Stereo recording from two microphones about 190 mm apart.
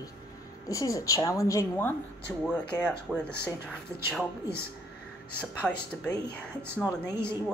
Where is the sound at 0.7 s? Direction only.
15° left (ahead or behind).